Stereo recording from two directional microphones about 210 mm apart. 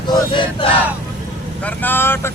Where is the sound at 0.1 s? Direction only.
25° left (ahead or behind).